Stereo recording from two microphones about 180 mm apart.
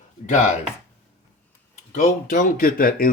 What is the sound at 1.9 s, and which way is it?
Speech, 45° left (ahead or behind).